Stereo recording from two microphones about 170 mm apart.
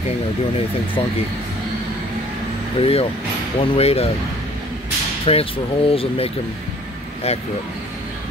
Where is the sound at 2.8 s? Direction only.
35° left (ahead or behind).